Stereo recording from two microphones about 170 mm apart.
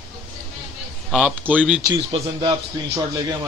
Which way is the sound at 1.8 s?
25° right (ahead or behind).